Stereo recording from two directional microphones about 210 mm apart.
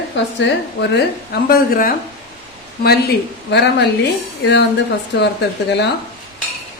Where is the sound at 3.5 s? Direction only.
55° left (ahead or behind).